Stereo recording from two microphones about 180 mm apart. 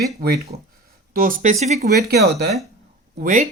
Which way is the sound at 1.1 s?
50° right (ahead or behind).